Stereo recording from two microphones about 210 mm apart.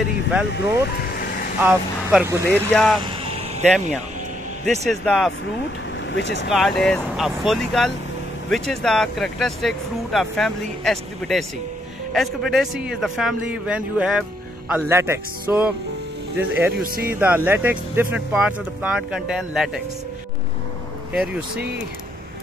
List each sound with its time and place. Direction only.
0.3 s speech: 5° right (ahead or behind)
0.8 s vehicle: 45° left (ahead or behind)
1.6 s speech: 5° right (ahead or behind)
2.7 s speech: 5° left (ahead or behind)
4.8 s speech: centre (ahead or behind)
6.1 s speech: 55° left (ahead or behind)
6.5 s speech: centre (ahead or behind)